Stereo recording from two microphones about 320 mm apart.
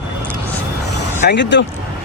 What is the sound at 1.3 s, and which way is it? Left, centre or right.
Speech, left.